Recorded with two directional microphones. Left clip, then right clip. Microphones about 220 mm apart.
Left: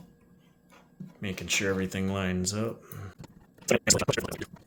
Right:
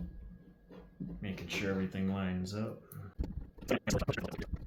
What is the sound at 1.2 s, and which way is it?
Speech, 55° left (ahead or behind).